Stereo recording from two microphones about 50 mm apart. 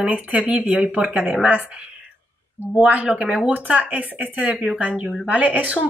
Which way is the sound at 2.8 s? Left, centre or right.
Right.